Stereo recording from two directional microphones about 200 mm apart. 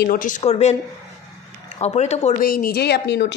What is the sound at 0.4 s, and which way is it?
Speech, 35° left (ahead or behind).